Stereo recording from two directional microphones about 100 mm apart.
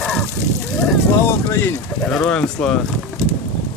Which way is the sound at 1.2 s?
25° left (ahead or behind).